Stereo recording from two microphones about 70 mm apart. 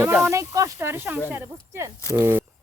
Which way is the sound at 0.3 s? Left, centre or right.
Right.